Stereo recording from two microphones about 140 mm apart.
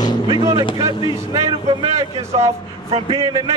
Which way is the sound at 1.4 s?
50° right (ahead or behind).